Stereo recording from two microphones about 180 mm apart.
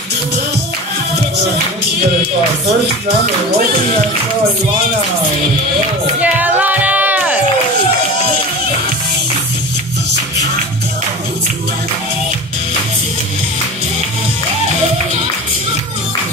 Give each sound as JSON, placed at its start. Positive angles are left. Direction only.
{"t": 6.2, "sound": "music", "side_deg": -10}